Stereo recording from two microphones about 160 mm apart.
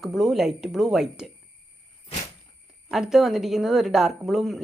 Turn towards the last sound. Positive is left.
turn(degrees=0)  # may be behind; listen again after turning